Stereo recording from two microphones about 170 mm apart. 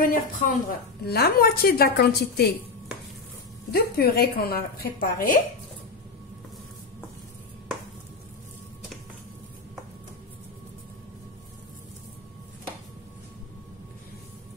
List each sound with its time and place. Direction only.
0.0 s a woman's voice: 55° left (ahead or behind)
3.7 s a woman's voice: 65° left (ahead or behind)